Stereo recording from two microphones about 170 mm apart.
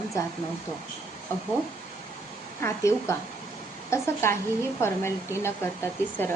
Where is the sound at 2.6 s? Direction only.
15° left (ahead or behind).